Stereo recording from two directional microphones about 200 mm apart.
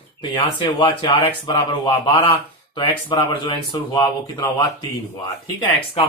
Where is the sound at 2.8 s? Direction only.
25° left (ahead or behind).